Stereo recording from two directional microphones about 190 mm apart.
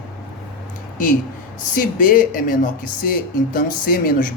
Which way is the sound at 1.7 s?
45° left (ahead or behind).